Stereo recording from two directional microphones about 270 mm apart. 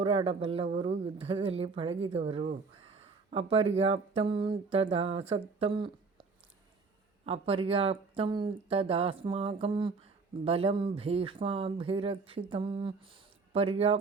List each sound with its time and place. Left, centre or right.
0.0 s speech: right
7.3 s speech: right